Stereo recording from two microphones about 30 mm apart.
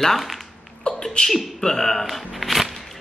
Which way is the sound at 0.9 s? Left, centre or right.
Left.